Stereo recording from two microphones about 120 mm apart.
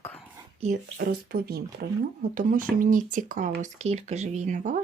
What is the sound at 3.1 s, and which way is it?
Speech, 90° right.